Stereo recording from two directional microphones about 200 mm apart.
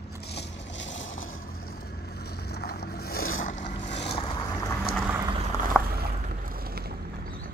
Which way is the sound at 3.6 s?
25° left (ahead or behind).